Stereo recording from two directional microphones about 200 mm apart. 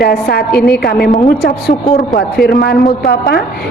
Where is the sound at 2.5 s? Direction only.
50° left (ahead or behind).